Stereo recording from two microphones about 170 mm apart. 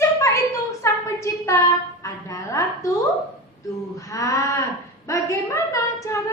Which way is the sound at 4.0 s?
20° left (ahead or behind).